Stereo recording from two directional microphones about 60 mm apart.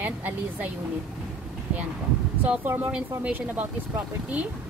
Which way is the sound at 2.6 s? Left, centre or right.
Right.